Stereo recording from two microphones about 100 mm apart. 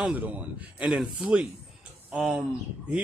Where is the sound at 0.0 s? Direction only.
15° right (ahead or behind).